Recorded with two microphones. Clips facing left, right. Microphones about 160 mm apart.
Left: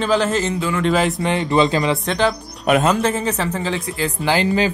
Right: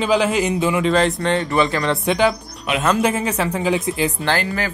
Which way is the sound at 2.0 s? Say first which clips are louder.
Right 2 dB; 10° right (ahead or behind).